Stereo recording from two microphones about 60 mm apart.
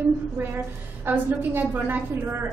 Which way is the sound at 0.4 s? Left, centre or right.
Right.